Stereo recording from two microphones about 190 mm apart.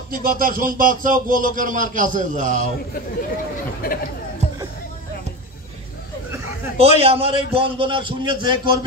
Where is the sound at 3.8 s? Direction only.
50° left (ahead or behind).